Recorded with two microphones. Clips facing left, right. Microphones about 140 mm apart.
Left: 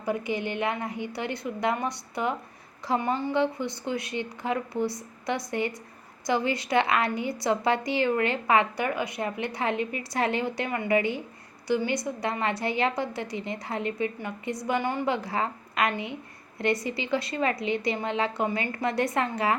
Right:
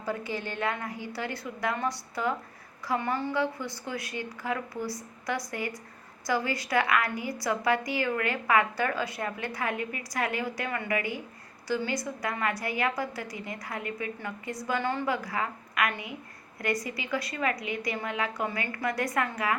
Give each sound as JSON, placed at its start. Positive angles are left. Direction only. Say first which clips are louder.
{"t": 0.0, "sound": "a woman's voice", "louder": "left 4 dB", "side_deg": 20}